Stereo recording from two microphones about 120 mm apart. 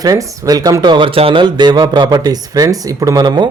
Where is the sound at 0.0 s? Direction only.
25° right (ahead or behind).